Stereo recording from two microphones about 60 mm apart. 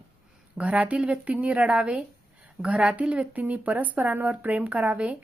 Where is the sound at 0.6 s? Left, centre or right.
Right.